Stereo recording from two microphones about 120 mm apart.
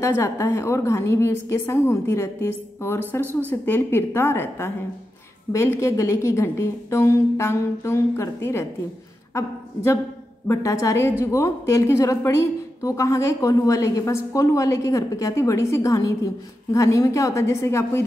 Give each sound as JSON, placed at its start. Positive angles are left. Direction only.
{"t": 0.0, "sound": "a woman's voice", "side_deg": 20}
{"t": 10.4, "sound": "a woman's voice", "side_deg": 25}